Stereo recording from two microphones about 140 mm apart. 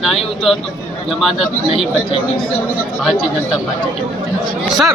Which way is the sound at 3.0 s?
Centre (ahead or behind).